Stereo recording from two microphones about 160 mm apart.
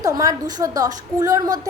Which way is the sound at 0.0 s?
20° right (ahead or behind).